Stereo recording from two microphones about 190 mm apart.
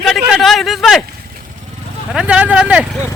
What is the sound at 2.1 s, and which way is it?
Vehicle, 5° right (ahead or behind).